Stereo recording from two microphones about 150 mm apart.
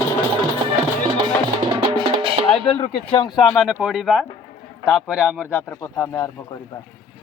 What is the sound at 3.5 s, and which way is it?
Speech, 5° right (ahead or behind).